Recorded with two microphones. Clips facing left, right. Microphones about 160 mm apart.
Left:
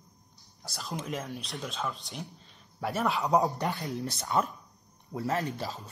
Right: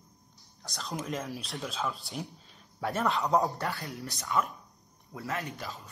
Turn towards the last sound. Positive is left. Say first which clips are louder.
# left 5 dB
turn(degrees=40)  # may be behind; listen again after turning